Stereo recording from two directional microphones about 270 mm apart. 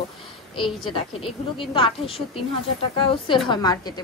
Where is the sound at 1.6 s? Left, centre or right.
Centre.